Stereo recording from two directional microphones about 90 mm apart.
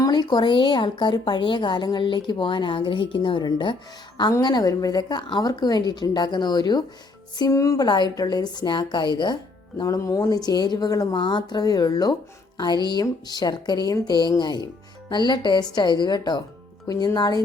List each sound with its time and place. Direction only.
0.0 s a woman's voice: 50° left (ahead or behind)
4.3 s speech: 50° left (ahead or behind)
7.5 s a woman's voice: 35° left (ahead or behind)
7.9 s speech: 55° left (ahead or behind)